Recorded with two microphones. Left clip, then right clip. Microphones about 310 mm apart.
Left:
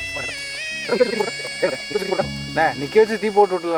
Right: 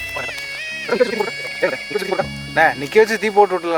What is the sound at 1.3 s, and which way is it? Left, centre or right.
Speech, centre.